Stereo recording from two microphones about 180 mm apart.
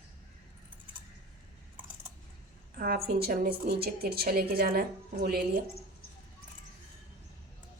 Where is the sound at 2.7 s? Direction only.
55° right (ahead or behind).